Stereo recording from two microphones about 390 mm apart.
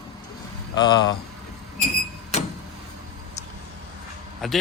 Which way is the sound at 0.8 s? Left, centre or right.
Centre.